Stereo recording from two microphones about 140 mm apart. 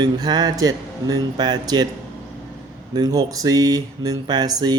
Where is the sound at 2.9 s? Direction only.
30° right (ahead or behind).